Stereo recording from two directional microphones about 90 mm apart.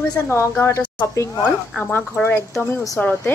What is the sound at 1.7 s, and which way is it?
Speech, 20° left (ahead or behind).